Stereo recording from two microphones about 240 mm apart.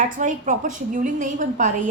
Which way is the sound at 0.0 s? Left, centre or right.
Right.